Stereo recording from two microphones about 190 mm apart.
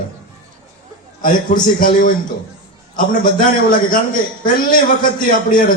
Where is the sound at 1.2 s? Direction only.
45° left (ahead or behind).